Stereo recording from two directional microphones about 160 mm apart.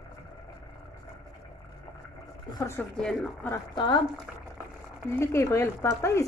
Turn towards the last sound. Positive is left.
turn(degrees=15)  # may be behind; listen again after turning